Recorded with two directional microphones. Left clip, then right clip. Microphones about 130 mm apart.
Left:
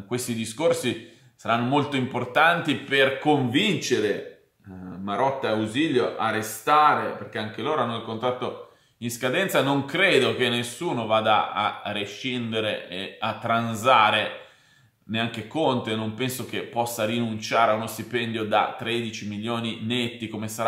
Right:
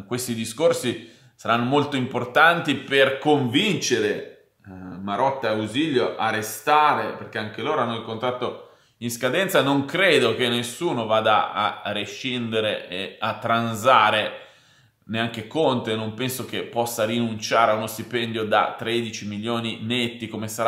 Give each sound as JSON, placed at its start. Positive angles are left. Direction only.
{"t": 0.1, "sound": "speech", "side_deg": -25}